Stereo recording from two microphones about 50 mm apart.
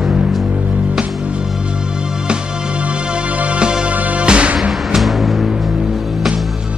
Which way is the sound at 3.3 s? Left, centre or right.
Right.